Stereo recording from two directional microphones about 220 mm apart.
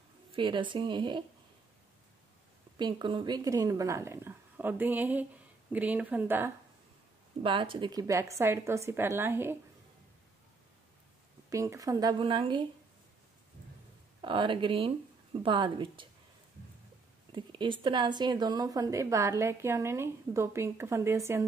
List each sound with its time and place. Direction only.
0.4 s speech: 20° right (ahead or behind)
2.8 s a woman's voice: 20° right (ahead or behind)
7.4 s a woman's voice: 25° right (ahead or behind)
11.5 s a woman's voice: 15° right (ahead or behind)
14.2 s speech: 20° right (ahead or behind)
17.3 s a woman's voice: 20° right (ahead or behind)